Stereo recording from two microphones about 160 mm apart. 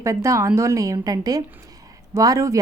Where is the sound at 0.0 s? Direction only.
20° right (ahead or behind).